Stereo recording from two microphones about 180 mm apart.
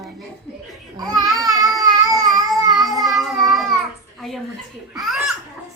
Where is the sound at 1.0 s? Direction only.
20° right (ahead or behind).